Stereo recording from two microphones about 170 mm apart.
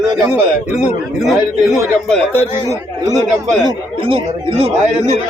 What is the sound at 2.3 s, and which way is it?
Speech, 15° right (ahead or behind).